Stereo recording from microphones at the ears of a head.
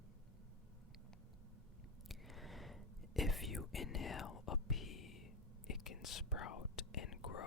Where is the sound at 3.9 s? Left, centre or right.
Left.